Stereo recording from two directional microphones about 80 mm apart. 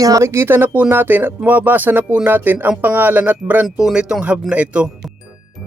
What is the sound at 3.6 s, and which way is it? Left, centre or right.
Speech, centre.